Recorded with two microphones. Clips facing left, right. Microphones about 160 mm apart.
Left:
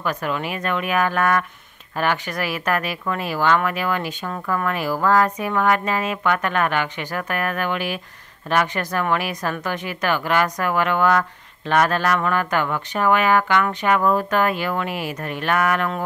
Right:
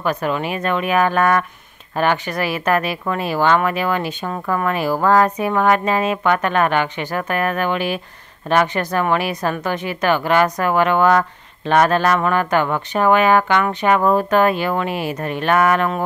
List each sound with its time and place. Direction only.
0.0 s a woman's voice: 25° right (ahead or behind)